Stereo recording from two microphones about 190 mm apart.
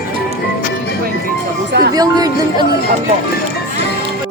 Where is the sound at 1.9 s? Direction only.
20° right (ahead or behind).